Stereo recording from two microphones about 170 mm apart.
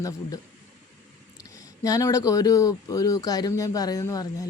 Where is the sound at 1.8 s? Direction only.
20° left (ahead or behind).